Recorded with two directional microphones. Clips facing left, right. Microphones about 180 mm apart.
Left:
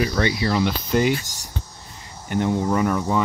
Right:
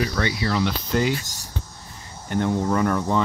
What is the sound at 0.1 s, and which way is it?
Speech, 25° left (ahead or behind).